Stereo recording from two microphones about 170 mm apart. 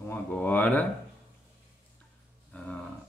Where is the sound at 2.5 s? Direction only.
10° left (ahead or behind).